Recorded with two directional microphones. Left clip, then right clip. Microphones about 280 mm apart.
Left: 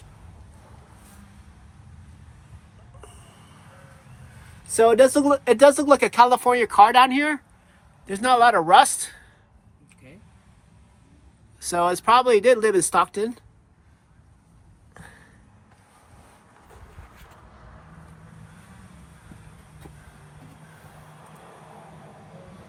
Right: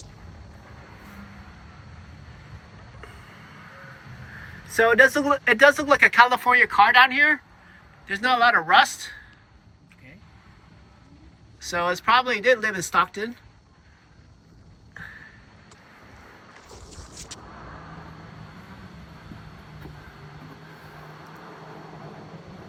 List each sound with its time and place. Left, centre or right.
4.8 s speech: centre
11.6 s speech: left